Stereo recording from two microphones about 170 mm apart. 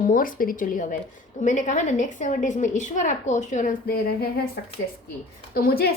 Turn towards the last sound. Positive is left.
turn(degrees=65)  # may be behind; listen again after turning